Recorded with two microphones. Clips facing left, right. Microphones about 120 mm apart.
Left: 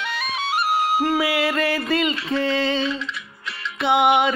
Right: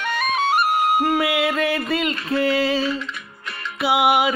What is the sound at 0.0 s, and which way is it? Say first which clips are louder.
Music: right 5 dB; 50° right (ahead or behind).